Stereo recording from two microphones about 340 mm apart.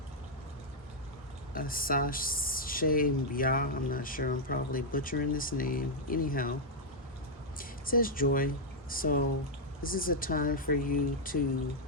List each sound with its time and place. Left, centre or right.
1.5 s speech: left
7.6 s speech: left